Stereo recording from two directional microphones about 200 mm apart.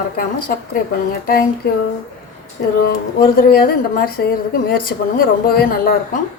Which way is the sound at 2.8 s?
45° left (ahead or behind).